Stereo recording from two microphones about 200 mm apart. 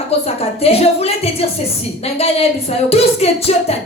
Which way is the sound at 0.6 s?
30° left (ahead or behind).